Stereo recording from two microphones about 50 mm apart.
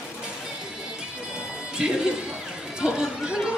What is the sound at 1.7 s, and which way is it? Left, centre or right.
Music, centre.